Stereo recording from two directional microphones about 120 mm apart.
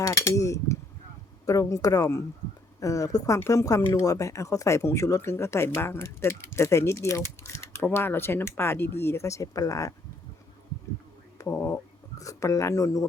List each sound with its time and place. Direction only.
0.0 s a sound: 25° left (ahead or behind)
1.5 s speech: 30° left (ahead or behind)
11.3 s speech: 20° left (ahead or behind)